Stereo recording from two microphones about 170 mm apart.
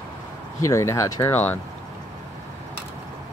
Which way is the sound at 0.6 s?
15° left (ahead or behind).